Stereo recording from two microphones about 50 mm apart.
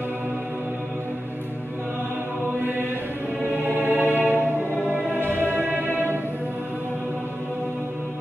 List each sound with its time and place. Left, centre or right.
3.6 s music: right